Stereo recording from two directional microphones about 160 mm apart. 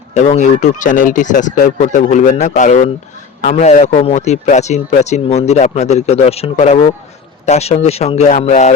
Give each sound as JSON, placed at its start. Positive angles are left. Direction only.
{"t": 0.1, "sound": "a man's voice", "side_deg": 50}